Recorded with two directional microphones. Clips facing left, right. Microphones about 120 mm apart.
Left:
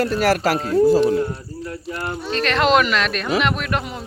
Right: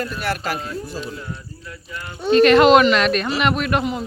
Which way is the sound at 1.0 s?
65° left (ahead or behind).